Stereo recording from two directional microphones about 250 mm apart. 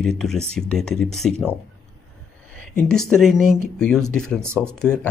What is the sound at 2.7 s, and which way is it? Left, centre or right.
Speech, centre.